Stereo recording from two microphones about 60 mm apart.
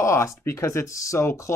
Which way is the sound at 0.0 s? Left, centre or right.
Left.